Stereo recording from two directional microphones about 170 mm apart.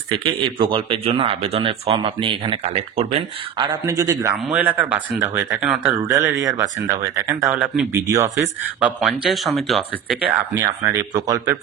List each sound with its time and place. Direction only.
0.1 s speech: 30° right (ahead or behind)
4.5 s speech: 10° right (ahead or behind)
6.0 s speech: 15° right (ahead or behind)
8.4 s speech: 5° right (ahead or behind)
10.8 s speech: 20° right (ahead or behind)